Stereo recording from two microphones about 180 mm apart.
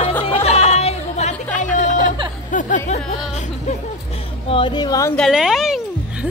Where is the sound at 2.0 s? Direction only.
25° right (ahead or behind).